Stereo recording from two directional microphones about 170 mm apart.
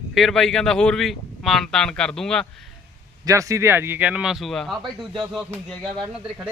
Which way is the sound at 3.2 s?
20° right (ahead or behind).